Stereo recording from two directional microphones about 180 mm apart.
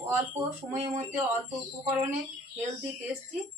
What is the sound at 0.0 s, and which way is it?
Speech, 10° right (ahead or behind).